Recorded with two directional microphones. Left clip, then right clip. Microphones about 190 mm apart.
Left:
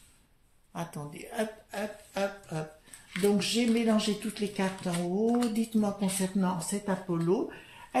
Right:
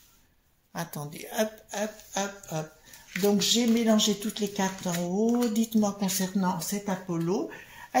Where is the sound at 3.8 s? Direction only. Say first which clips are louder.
Right 4 dB; 30° right (ahead or behind).